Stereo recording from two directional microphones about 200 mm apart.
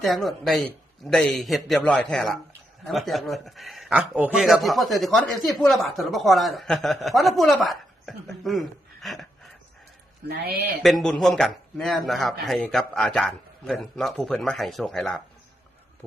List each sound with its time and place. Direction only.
0.0 s a man's voice: centre (ahead or behind)
10.2 s speech: 50° right (ahead or behind)
10.8 s a man's voice: centre (ahead or behind)